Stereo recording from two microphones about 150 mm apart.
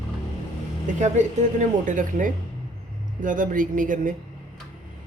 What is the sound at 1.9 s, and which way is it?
A woman's voice, 60° right (ahead or behind).